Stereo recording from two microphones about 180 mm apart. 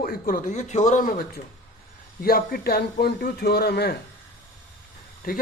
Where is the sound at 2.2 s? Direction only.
55° left (ahead or behind).